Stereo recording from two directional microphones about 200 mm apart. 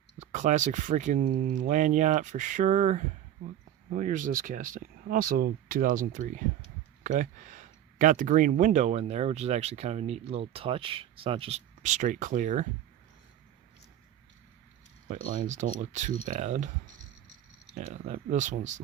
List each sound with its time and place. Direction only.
0.2 s speech: 35° right (ahead or behind)
15.0 s speech: 40° right (ahead or behind)
17.7 s speech: 35° right (ahead or behind)